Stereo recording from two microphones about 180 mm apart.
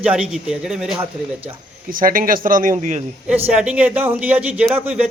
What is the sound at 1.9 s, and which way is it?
Speech, 50° right (ahead or behind).